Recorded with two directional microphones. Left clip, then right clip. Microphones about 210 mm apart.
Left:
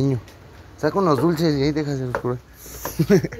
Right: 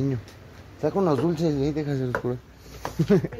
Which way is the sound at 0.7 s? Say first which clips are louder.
Left 4 dB; centre (ahead or behind).